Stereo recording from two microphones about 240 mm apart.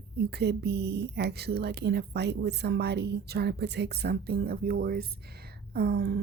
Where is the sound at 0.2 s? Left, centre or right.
Right.